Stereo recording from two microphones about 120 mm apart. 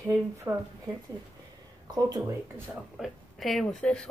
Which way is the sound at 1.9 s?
35° right (ahead or behind).